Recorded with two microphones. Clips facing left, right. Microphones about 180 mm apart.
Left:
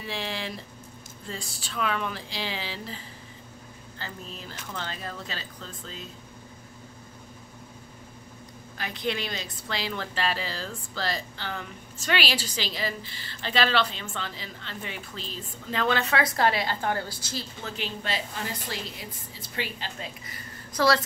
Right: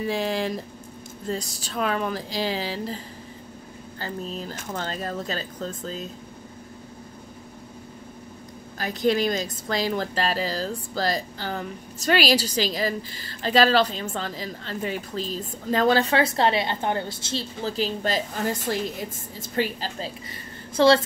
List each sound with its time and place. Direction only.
0.0 s a woman's voice: 45° right (ahead or behind)
4.0 s a woman's voice: 40° right (ahead or behind)
8.7 s a woman's voice: 40° right (ahead or behind)